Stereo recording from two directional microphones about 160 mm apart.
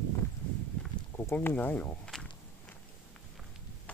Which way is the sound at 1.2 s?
15° left (ahead or behind).